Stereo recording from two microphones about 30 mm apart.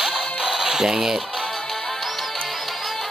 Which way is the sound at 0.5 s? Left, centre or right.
Centre.